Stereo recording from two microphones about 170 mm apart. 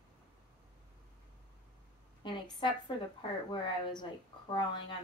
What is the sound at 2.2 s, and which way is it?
Speech, 30° left (ahead or behind).